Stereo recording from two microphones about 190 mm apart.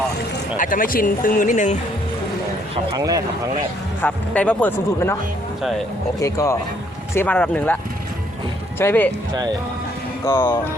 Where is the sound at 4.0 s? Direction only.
5° left (ahead or behind).